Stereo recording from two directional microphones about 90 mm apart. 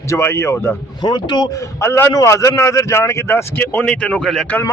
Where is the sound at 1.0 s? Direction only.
55° left (ahead or behind).